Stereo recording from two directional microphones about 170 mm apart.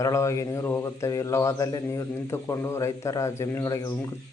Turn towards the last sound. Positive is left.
turn(degrees=20)  # may be behind; listen again after turning